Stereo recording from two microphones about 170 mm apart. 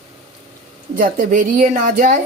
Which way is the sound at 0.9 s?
55° right (ahead or behind).